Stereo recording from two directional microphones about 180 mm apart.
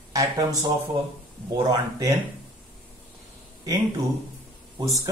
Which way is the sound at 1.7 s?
20° right (ahead or behind).